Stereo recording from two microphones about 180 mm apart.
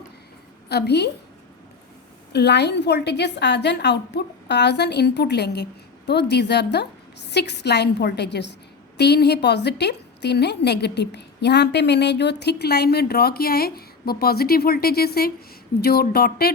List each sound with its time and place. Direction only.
0.7 s a woman's voice: 65° left (ahead or behind)
2.3 s a woman's voice: 70° left (ahead or behind)